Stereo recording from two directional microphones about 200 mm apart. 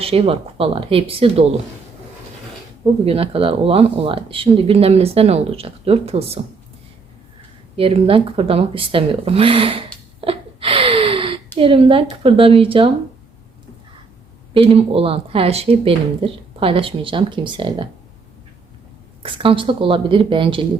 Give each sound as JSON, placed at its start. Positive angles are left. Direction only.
{"t": 0.0, "sound": "speech", "side_deg": -30}
{"t": 3.0, "sound": "speech", "side_deg": -30}
{"t": 7.8, "sound": "speech", "side_deg": -30}
{"t": 14.6, "sound": "speech", "side_deg": -30}
{"t": 19.2, "sound": "speech", "side_deg": -25}